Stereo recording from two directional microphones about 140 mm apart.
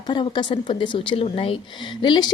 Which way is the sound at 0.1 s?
35° left (ahead or behind).